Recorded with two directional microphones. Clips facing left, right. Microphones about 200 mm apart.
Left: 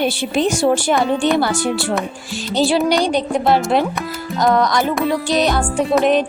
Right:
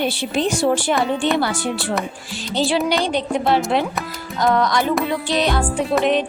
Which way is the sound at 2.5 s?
40° left (ahead or behind).